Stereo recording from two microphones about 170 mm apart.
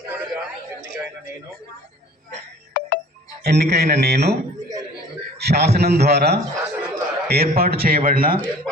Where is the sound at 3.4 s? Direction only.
70° right (ahead or behind).